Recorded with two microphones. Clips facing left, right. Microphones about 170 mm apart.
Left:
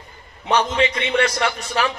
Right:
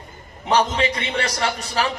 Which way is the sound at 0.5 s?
35° right (ahead or behind).